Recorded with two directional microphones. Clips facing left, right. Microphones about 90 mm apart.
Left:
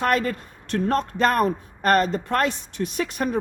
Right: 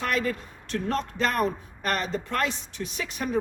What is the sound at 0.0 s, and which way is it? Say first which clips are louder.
Speech: left 5 dB; 50° left (ahead or behind).